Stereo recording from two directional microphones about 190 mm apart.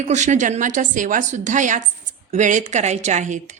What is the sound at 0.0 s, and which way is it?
A woman's voice, 40° right (ahead or behind).